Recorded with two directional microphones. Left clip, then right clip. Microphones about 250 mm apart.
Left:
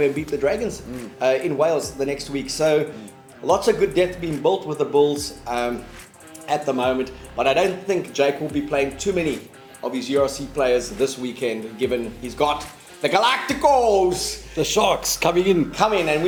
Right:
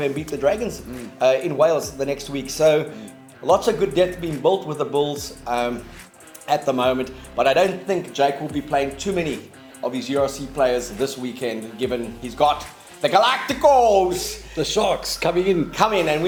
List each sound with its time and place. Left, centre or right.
0.0 s speech: right
14.5 s speech: centre
15.7 s speech: right